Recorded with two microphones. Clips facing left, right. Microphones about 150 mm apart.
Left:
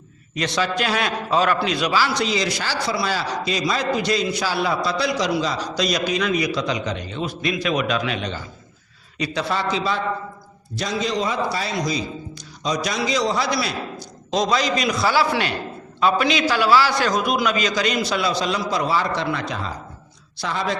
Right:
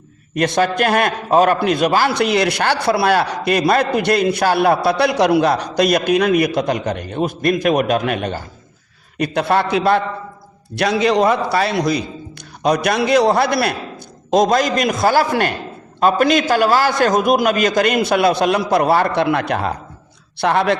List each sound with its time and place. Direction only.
0.3 s a man's voice: 55° right (ahead or behind)